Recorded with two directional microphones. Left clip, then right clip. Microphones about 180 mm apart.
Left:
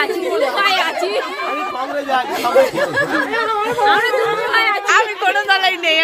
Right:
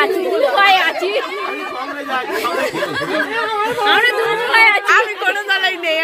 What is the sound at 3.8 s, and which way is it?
Speech, 40° right (ahead or behind).